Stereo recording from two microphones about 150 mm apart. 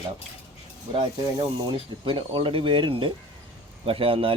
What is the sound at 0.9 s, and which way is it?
Speech, 35° right (ahead or behind).